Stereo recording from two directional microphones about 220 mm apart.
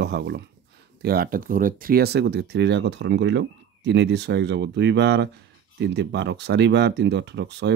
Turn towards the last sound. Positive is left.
turn(degrees=-50)  # may be behind; listen again after turning